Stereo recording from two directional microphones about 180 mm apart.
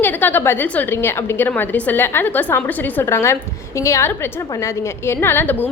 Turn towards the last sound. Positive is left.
turn(degrees=10)  # may be behind; listen again after turning